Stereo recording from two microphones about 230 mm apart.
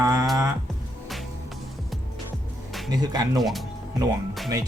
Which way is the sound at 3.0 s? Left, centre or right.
Centre.